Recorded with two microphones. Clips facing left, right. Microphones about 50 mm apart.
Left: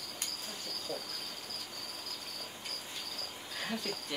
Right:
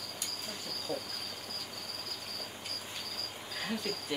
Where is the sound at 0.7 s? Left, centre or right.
Centre.